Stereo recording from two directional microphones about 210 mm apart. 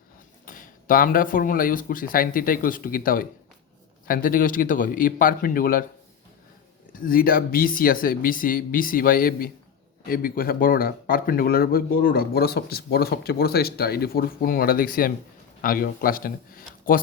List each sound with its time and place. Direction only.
0.4 s speech: 40° left (ahead or behind)
7.0 s speech: 45° left (ahead or behind)